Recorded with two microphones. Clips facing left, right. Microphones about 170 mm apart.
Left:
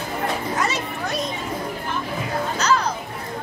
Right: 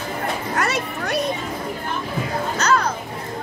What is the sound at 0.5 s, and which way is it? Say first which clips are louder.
Children playing: right 1 dB; 65° right (ahead or behind).